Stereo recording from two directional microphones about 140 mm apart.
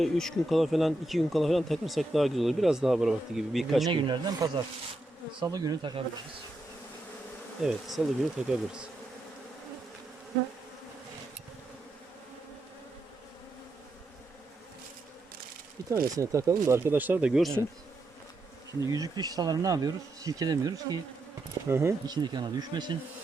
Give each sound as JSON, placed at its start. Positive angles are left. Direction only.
{"t": 0.0, "sound": "speech", "side_deg": 0}
{"t": 3.8, "sound": "speech", "side_deg": -35}
{"t": 7.6, "sound": "speech", "side_deg": 0}
{"t": 16.1, "sound": "speech", "side_deg": -20}
{"t": 18.9, "sound": "speech", "side_deg": -25}
{"t": 22.1, "sound": "speech", "side_deg": -30}